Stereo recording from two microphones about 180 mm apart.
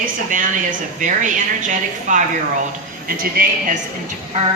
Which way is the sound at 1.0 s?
45° right (ahead or behind).